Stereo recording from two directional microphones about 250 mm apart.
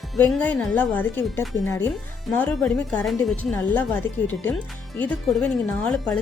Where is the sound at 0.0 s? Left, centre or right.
Centre.